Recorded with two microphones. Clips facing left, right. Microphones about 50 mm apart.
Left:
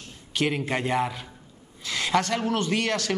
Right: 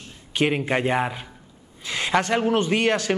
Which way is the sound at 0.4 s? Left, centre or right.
Right.